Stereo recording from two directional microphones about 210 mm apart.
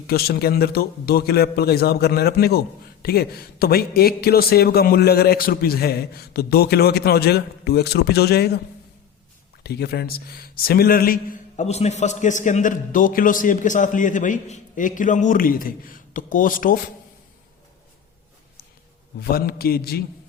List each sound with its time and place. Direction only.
0.1 s a man's voice: 45° left (ahead or behind)
9.6 s a man's voice: 50° left (ahead or behind)
19.2 s a man's voice: 45° left (ahead or behind)